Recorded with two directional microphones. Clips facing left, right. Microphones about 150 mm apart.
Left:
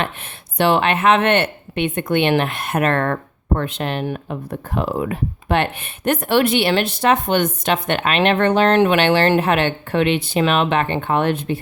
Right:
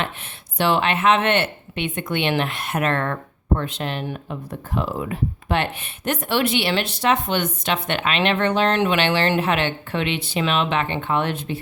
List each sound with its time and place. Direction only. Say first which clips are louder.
0.5 s a woman's voice: left 4 dB; 55° left (ahead or behind)